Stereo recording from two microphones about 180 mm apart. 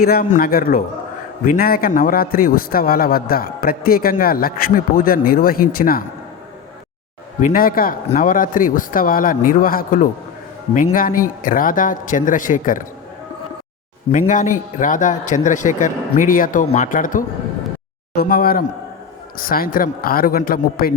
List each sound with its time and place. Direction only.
0.0 s a man's voice: 55° left (ahead or behind)
7.4 s a man's voice: 50° left (ahead or behind)
14.1 s a man's voice: 45° left (ahead or behind)